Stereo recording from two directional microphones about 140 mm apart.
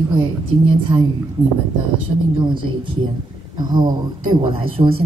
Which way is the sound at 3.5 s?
35° right (ahead or behind).